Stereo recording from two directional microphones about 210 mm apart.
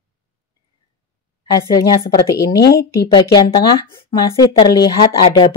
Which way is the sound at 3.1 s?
20° left (ahead or behind).